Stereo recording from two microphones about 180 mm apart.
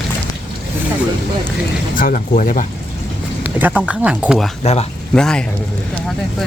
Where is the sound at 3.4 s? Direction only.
10° right (ahead or behind).